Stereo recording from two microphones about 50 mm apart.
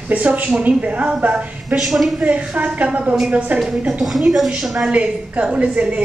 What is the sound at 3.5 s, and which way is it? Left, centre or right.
Speech, centre.